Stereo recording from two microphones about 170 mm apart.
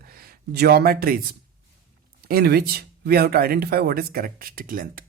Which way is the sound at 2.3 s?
65° right (ahead or behind).